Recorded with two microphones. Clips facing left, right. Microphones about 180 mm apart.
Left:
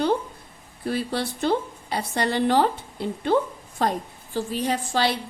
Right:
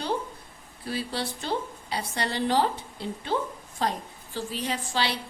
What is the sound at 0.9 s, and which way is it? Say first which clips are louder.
A woman's voice: left 4 dB; 55° left (ahead or behind).